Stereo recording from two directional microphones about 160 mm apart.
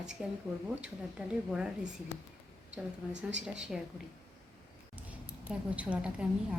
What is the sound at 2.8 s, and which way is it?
A woman's voice, 10° right (ahead or behind).